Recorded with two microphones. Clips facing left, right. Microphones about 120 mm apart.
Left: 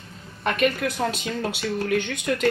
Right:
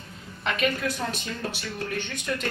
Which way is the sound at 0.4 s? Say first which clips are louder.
Left 4 dB; 55° left (ahead or behind).